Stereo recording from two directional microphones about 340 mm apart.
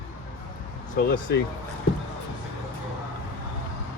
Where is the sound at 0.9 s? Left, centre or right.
Left.